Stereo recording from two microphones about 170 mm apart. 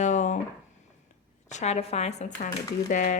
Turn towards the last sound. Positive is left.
turn(degrees=50)  # may be behind; listen again after turning